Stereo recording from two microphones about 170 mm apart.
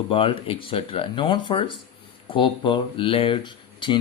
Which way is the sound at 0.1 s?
30° left (ahead or behind).